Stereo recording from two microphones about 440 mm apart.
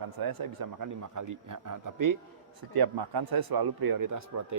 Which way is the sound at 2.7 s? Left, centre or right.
Right.